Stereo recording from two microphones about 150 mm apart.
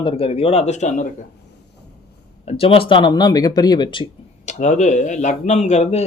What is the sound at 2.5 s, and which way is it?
Speech, 40° left (ahead or behind).